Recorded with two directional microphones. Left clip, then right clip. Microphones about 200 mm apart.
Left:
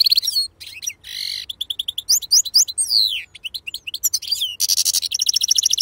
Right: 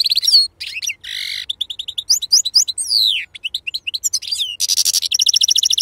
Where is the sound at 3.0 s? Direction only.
15° right (ahead or behind).